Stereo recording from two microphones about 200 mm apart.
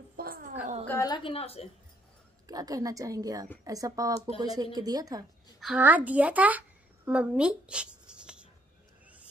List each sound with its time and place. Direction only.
0.1 s a sound: 45° right (ahead or behind)
0.8 s a woman's voice: 15° left (ahead or behind)
2.4 s a woman's voice: 20° right (ahead or behind)
5.6 s a woman's voice: 5° right (ahead or behind)
7.1 s writing: 5° right (ahead or behind)